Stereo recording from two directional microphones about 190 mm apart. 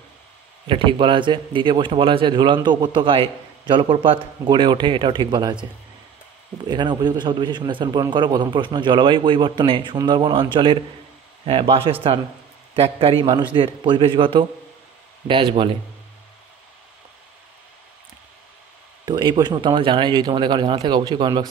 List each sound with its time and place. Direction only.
0.7 s a man's voice: 25° right (ahead or behind)
6.7 s a man's voice: 25° right (ahead or behind)
19.0 s a man's voice: 25° right (ahead or behind)